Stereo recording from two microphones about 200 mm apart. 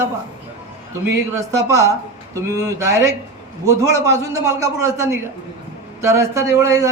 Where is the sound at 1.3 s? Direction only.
15° right (ahead or behind).